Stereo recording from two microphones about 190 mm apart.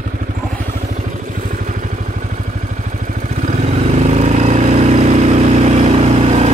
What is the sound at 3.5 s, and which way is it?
Vehicle, 35° right (ahead or behind).